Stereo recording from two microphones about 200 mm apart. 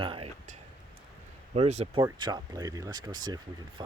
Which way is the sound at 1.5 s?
30° right (ahead or behind).